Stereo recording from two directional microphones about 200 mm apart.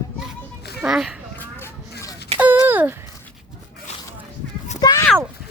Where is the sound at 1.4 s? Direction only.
10° left (ahead or behind).